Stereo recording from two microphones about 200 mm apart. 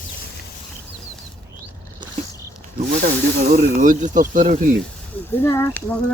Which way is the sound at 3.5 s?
40° right (ahead or behind).